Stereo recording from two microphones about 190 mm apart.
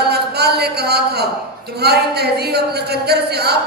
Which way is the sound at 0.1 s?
60° right (ahead or behind).